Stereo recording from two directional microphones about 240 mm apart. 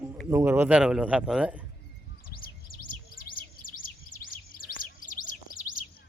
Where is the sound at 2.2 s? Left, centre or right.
Left.